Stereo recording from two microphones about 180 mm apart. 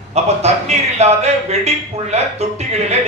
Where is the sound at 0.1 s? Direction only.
35° right (ahead or behind).